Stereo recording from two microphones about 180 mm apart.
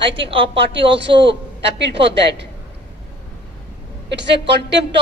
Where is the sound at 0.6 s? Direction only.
75° right (ahead or behind).